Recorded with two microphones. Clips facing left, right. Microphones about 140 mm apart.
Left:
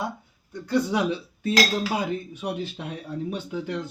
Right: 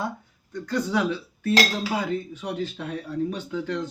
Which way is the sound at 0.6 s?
15° left (ahead or behind).